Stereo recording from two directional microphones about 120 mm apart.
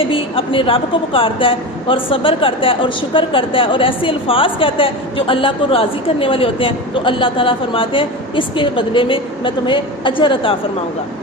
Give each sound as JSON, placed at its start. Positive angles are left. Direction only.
{"t": 0.0, "sound": "speech", "side_deg": 50}